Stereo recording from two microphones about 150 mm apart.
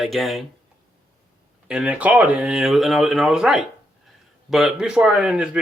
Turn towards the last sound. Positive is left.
turn(degrees=-5)  # may be behind; listen again after turning